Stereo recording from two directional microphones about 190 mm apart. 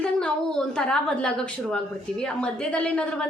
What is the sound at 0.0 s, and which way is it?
A woman's voice, 5° left (ahead or behind).